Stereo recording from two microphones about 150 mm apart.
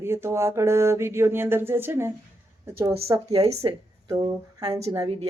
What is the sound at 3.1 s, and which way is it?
Speech, 30° right (ahead or behind).